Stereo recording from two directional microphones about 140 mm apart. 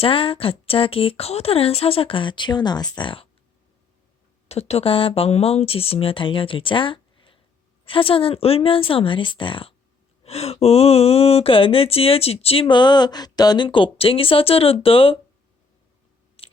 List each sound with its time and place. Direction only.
0.0 s a woman's voice: 40° left (ahead or behind)
4.4 s a woman's voice: 50° left (ahead or behind)
16.4 s a sound: 45° left (ahead or behind)